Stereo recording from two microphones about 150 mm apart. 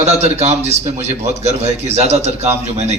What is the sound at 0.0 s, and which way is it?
A man's voice, 45° right (ahead or behind).